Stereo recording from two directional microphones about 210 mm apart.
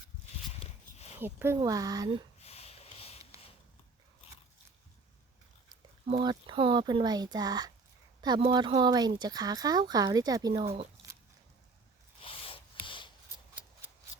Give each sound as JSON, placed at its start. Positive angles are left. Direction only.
{"t": 0.6, "sound": "horse", "side_deg": 30}
{"t": 1.2, "sound": "speech", "side_deg": -10}
{"t": 2.4, "sound": "sniff", "side_deg": 30}
{"t": 5.6, "sound": "speech", "side_deg": -20}
{"t": 12.2, "sound": "a sound", "side_deg": 25}